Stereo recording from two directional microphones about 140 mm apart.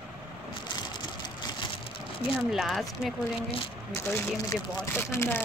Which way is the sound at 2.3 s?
5° right (ahead or behind).